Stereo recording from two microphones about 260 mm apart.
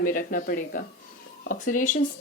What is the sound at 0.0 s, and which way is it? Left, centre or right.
Speech, left.